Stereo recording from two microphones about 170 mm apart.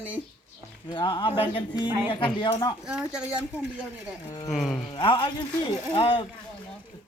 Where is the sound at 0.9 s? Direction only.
30° left (ahead or behind).